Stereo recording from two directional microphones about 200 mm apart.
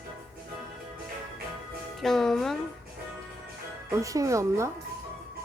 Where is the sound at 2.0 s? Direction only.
Centre (ahead or behind).